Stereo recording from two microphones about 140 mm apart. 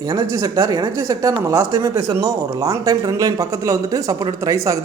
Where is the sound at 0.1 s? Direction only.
25° right (ahead or behind).